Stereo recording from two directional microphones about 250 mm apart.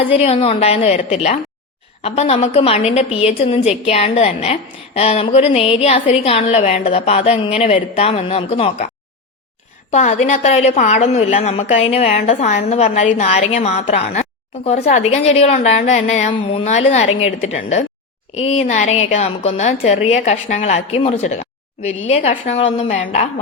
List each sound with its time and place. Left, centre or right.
0.0 s a woman's voice: left
9.9 s a woman's voice: left